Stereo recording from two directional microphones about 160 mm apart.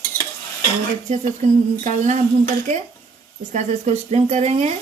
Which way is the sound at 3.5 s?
45° right (ahead or behind).